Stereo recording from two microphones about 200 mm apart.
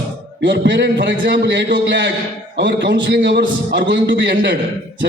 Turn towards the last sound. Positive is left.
turn(degrees=-60)  # may be behind; listen again after turning